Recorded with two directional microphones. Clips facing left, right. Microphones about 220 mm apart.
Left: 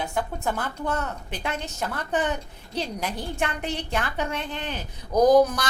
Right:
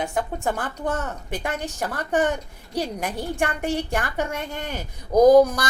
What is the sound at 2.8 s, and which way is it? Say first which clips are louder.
Speech: right 3 dB; 50° right (ahead or behind).